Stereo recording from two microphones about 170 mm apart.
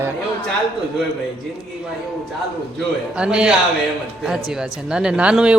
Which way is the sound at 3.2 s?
5° right (ahead or behind).